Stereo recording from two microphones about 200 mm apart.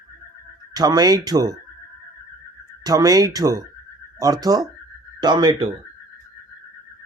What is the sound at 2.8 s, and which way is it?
Speech, 20° right (ahead or behind).